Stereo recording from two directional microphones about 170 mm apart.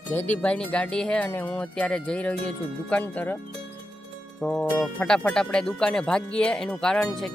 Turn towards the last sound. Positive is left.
turn(degrees=5)  # may be behind; listen again after turning